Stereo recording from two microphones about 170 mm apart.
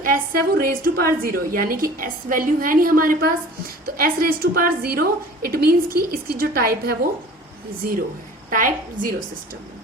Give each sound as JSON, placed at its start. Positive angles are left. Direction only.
{"t": 0.0, "sound": "a woman's voice", "side_deg": -55}
{"t": 8.4, "sound": "a woman's voice", "side_deg": -50}